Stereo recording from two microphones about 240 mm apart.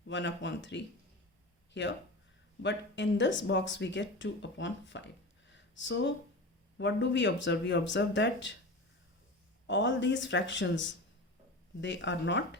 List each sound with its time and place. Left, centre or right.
0.1 s speech: left
5.5 s a sound: left
6.7 s speech: left
9.6 s speech: left